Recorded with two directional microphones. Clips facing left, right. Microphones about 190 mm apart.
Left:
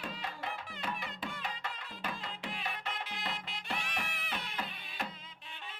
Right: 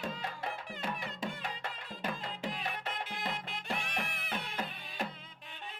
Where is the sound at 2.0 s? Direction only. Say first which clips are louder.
Right 4 dB; 45° right (ahead or behind).